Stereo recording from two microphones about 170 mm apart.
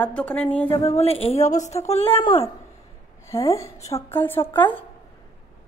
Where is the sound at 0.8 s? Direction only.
40° left (ahead or behind).